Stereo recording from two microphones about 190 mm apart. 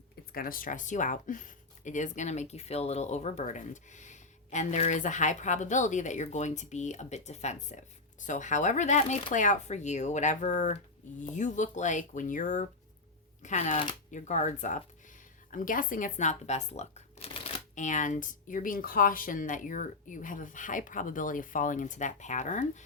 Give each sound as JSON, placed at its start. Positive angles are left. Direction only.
{"t": 0.3, "sound": "speech", "side_deg": 50}